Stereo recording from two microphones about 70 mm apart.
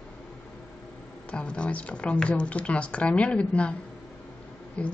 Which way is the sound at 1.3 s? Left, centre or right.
Centre.